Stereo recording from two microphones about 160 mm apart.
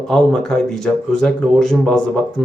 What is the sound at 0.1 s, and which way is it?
Speech, 5° left (ahead or behind).